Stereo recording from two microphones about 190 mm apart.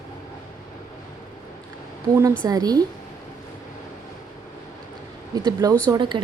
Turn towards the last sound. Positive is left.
turn(degrees=-25)  # may be behind; listen again after turning